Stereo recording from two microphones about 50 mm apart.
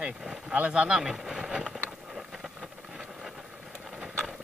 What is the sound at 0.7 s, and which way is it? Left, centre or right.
Speech, centre.